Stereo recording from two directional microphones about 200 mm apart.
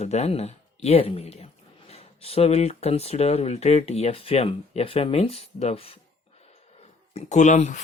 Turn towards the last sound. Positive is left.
turn(degrees=35)  # may be behind; listen again after turning